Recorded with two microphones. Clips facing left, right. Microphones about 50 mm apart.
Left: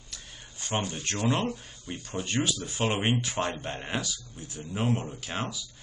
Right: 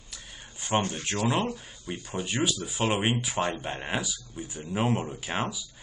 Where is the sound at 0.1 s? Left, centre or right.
Centre.